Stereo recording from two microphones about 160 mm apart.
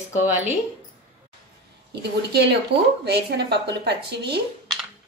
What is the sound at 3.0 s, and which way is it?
Speech, 90° right.